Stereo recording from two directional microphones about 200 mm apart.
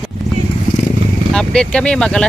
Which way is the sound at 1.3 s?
5° left (ahead or behind).